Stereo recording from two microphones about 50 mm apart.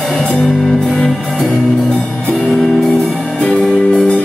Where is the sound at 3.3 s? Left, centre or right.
Left.